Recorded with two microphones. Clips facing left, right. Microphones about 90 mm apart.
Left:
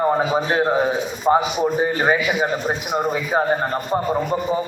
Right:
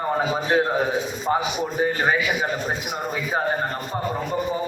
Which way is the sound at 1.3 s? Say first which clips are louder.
Left 7 dB; 30° left (ahead or behind).